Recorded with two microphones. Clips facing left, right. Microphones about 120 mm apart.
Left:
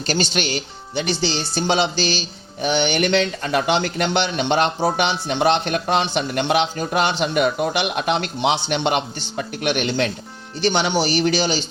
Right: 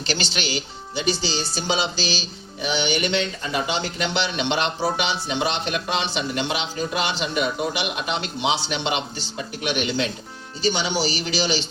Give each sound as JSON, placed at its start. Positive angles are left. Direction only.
{"t": 0.0, "sound": "speech", "side_deg": 45}